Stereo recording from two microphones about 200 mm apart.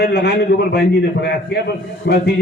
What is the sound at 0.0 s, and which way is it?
A man's voice, 55° left (ahead or behind).